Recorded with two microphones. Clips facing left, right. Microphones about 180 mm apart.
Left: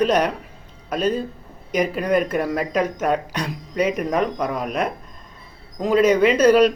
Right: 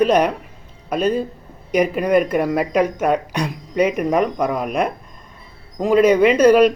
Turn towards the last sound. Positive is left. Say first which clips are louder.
# right 2 dB
turn(degrees=-10)  # may be behind; listen again after turning